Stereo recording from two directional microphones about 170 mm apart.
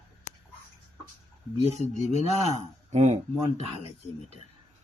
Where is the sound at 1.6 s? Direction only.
40° left (ahead or behind).